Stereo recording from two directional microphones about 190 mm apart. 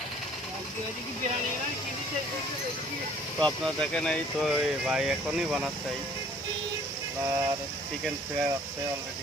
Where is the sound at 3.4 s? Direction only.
5° left (ahead or behind).